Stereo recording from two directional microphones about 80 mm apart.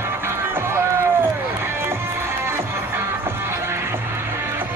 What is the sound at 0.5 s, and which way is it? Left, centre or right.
Run, right.